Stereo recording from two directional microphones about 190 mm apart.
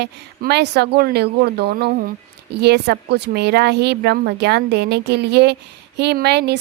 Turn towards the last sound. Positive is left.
turn(degrees=-60)  # may be behind; listen again after turning